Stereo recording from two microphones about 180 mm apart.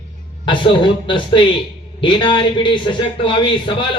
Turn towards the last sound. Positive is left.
turn(degrees=25)  # may be behind; listen again after turning